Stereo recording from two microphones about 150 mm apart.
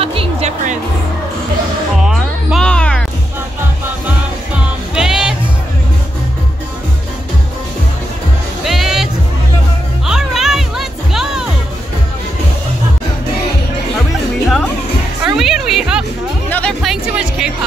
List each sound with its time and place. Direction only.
0.0 s music: 40° right (ahead or behind)
2.0 s music: centre (ahead or behind)
4.6 s music: 5° right (ahead or behind)
8.6 s music: centre (ahead or behind)
15.2 s music: centre (ahead or behind)
16.4 s music: 10° left (ahead or behind)
16.8 s music: 5° right (ahead or behind)